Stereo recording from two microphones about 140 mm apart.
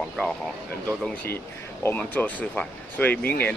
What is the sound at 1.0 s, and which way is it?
Speech, 15° left (ahead or behind).